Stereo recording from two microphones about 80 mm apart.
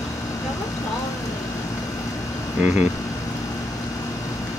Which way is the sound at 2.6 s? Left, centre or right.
Centre.